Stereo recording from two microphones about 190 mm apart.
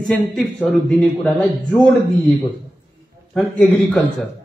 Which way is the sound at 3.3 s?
5° left (ahead or behind).